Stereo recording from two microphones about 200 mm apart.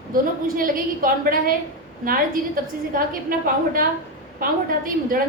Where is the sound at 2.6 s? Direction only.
45° right (ahead or behind).